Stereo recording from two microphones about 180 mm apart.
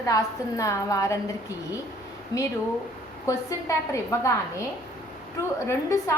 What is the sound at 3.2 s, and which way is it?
A woman's voice, 15° left (ahead or behind).